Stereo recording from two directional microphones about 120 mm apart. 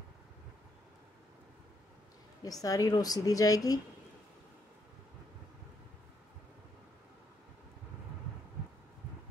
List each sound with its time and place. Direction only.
2.4 s a woman's voice: 30° left (ahead or behind)